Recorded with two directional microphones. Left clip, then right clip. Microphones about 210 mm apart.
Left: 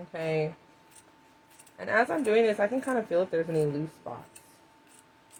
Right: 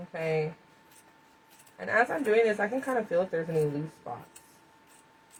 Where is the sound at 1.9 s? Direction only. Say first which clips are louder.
Even; 45° left (ahead or behind).